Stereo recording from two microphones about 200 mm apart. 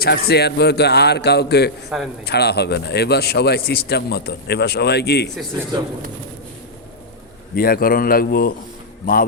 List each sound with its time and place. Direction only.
0.0 s a man's voice: 55° left (ahead or behind)
1.9 s a man's voice: centre (ahead or behind)
2.2 s a man's voice: 55° left (ahead or behind)
7.5 s a man's voice: 50° left (ahead or behind)